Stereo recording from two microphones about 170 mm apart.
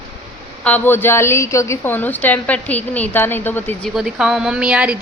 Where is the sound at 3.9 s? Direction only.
5° right (ahead or behind).